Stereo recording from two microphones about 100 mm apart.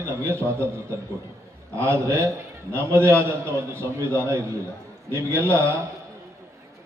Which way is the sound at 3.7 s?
25° right (ahead or behind).